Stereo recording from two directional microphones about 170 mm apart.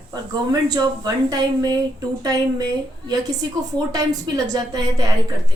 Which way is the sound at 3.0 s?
20° right (ahead or behind).